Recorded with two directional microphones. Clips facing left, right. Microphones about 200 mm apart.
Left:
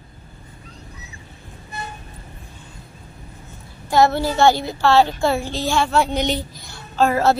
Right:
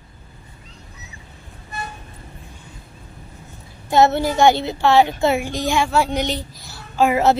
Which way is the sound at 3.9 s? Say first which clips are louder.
Right 1 dB; 20° right (ahead or behind).